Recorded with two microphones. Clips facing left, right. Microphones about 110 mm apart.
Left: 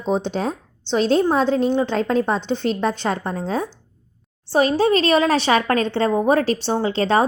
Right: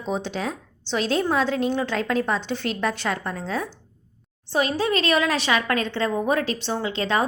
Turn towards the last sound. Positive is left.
turn(degrees=35)  # may be behind; listen again after turning